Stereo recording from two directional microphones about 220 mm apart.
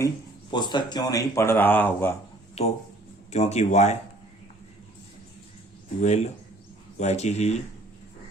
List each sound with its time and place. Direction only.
0.5 s speech: 20° left (ahead or behind)
2.6 s a man's voice: 30° left (ahead or behind)
6.0 s a man's voice: 30° left (ahead or behind)